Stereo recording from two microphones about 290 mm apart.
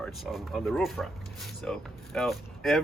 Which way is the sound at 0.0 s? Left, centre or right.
Centre.